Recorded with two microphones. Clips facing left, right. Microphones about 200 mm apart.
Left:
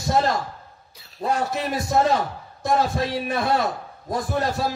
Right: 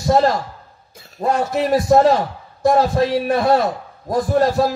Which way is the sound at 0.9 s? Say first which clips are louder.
Right 5 dB; 50° right (ahead or behind).